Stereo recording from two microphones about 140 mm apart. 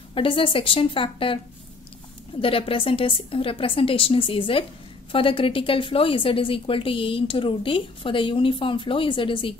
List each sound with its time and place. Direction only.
0.1 s a woman's voice: 40° left (ahead or behind)
2.4 s a woman's voice: 40° left (ahead or behind)